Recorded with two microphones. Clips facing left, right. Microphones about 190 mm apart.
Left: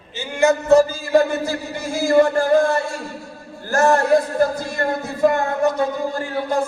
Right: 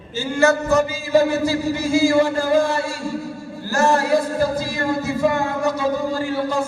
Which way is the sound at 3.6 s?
55° left (ahead or behind).